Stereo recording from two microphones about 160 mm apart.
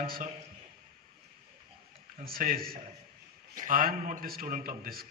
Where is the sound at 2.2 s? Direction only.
65° right (ahead or behind).